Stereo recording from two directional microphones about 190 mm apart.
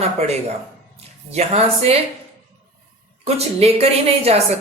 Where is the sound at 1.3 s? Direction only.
35° right (ahead or behind).